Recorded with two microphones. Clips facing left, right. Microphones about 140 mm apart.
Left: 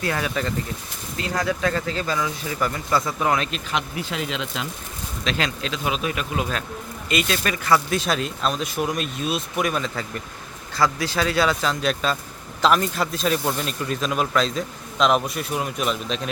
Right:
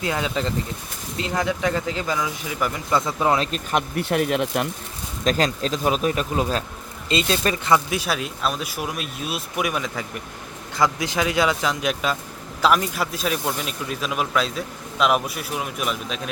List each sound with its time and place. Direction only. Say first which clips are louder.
0.0 s speech: right 1 dB; 20° right (ahead or behind)
3.0 s speech: right 2 dB; 25° right (ahead or behind)
3.7 s speech: right 5 dB; 50° right (ahead or behind)
5.2 s speech: right 5 dB; 40° right (ahead or behind); by 7.8 s 25° right (ahead or behind)
7.9 s speech: left 2 dB; 10° right (ahead or behind)